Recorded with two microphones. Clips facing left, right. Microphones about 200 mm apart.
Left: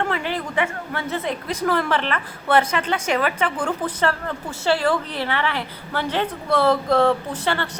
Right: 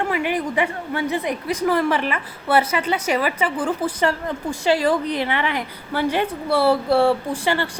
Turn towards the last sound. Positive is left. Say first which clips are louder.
# right 2 dB
turn(degrees=-10)  # may be behind; listen again after turning